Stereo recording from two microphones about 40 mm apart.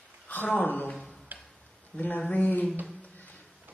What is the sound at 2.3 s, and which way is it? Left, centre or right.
Speech, left.